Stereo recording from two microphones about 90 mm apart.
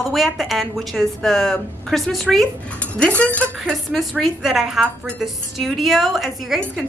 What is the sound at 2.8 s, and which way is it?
Speech, 15° left (ahead or behind).